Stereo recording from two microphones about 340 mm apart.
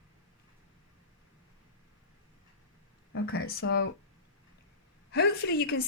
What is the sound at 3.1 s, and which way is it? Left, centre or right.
Speech, left.